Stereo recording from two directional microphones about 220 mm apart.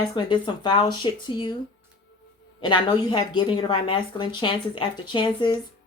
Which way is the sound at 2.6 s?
20° left (ahead or behind).